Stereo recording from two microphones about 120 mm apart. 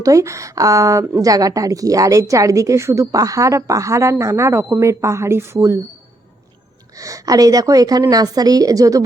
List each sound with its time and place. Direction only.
0.0 s a woman's voice: 25° right (ahead or behind)
6.9 s a woman's voice: 30° right (ahead or behind)